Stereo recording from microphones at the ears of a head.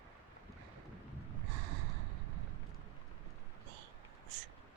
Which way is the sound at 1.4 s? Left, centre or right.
Right.